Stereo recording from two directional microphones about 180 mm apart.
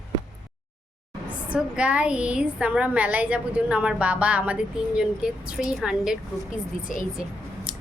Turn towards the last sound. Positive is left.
turn(degrees=-5)  # may be behind; listen again after turning